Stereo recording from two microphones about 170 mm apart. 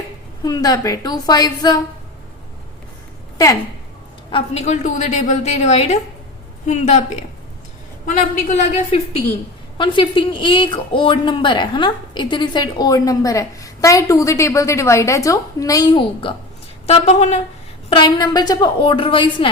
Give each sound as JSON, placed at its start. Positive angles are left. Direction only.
{"t": 0.4, "sound": "speech", "side_deg": 20}
{"t": 3.3, "sound": "speech", "side_deg": 20}
{"t": 4.3, "sound": "a woman's voice", "side_deg": 35}
{"t": 8.0, "sound": "a woman's voice", "side_deg": 45}
{"t": 9.7, "sound": "speech", "side_deg": 30}
{"t": 16.8, "sound": "speech", "side_deg": 40}
{"t": 17.8, "sound": "speech", "side_deg": 30}